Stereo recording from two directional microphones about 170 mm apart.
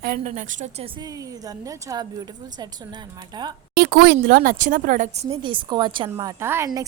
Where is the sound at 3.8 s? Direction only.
70° right (ahead or behind); by 6.1 s 25° right (ahead or behind).